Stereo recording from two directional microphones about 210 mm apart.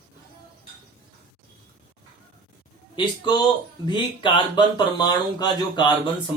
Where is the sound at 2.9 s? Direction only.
20° left (ahead or behind).